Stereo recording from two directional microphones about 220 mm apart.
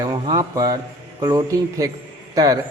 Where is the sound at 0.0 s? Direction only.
20° right (ahead or behind).